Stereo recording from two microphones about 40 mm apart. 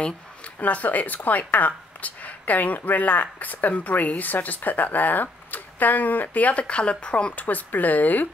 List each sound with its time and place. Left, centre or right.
0.6 s a woman's voice: left
6.6 s speech: left
7.3 s a woman's voice: left